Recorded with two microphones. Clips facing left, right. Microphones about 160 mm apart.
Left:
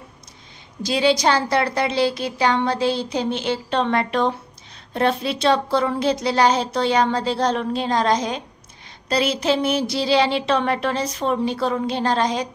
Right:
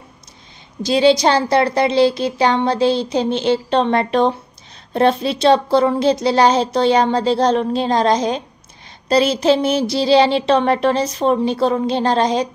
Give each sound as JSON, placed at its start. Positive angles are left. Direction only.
{"t": 0.8, "sound": "a woman's voice", "side_deg": -30}